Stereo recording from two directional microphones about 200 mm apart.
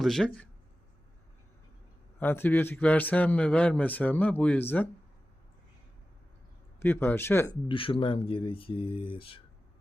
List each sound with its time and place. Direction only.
0.0 s speech: centre (ahead or behind)
2.1 s a man's voice: 10° left (ahead or behind)
6.7 s a man's voice: 10° left (ahead or behind)
7.7 s speech: 25° left (ahead or behind)